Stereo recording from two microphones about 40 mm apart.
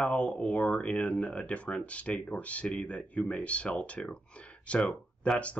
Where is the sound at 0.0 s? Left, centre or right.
Left.